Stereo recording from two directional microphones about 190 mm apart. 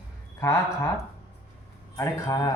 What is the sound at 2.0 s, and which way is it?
Speech, 15° left (ahead or behind).